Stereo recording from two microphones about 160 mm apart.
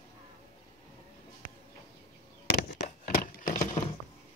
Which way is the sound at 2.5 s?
65° left (ahead or behind).